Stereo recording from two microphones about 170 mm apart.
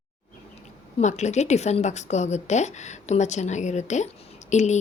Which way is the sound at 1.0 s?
45° left (ahead or behind).